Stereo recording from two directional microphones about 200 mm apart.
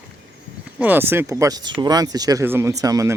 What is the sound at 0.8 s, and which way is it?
Speech, 10° right (ahead or behind).